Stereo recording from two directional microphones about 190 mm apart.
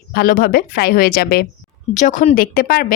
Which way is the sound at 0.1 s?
50° left (ahead or behind).